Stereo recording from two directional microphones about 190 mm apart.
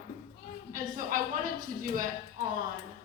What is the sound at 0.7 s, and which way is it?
Speech, 45° right (ahead or behind).